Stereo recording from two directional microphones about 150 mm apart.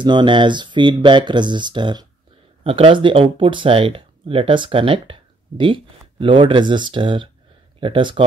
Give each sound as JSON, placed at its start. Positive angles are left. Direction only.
{"t": 0.0, "sound": "speech", "side_deg": -30}